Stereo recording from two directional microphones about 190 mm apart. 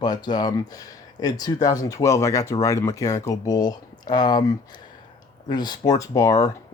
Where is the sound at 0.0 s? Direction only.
20° left (ahead or behind).